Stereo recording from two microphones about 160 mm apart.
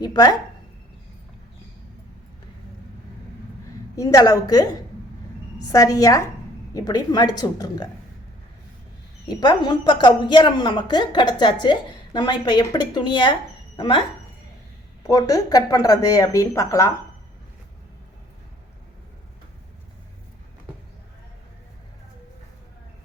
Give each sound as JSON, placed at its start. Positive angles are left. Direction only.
{"t": 0.0, "sound": "a woman's voice", "side_deg": 25}
{"t": 3.7, "sound": "a woman's voice", "side_deg": 20}
{"t": 9.3, "sound": "a woman's voice", "side_deg": 25}
{"t": 15.0, "sound": "a woman's voice", "side_deg": 20}